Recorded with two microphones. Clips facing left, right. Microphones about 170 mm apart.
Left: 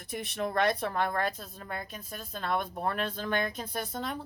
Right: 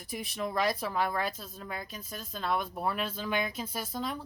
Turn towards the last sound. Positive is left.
turn(degrees=0)  # may be behind; listen again after turning